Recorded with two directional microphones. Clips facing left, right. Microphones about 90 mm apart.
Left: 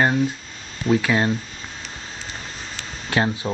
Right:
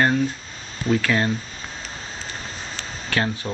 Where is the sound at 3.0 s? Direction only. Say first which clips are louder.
Left 3 dB; 20° left (ahead or behind).